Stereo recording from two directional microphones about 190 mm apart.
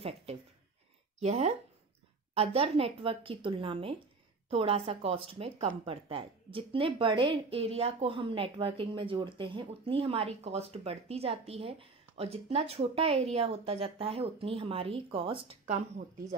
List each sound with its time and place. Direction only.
1.2 s speech: 35° right (ahead or behind)